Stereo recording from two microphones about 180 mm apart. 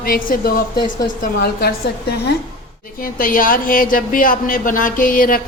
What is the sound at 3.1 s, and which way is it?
Speech, 50° left (ahead or behind).